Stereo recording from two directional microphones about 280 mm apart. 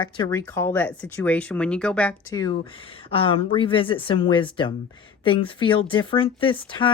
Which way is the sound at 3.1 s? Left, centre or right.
Centre.